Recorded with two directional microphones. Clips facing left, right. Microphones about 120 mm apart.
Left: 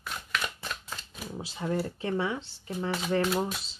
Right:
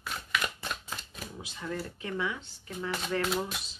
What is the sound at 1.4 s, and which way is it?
Speech, 30° left (ahead or behind).